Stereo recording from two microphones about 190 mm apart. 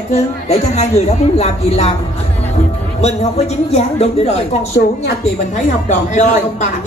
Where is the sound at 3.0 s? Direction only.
35° left (ahead or behind).